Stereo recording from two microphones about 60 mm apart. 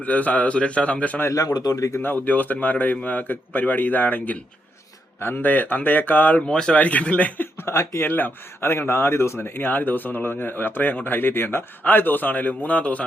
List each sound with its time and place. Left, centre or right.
0.0 s a man's voice: left
1.3 s speech: left
2.0 s a man's voice: left
6.4 s a man's voice: centre
7.6 s speech: left
8.0 s speech: left
8.9 s speech: left
9.6 s speech: left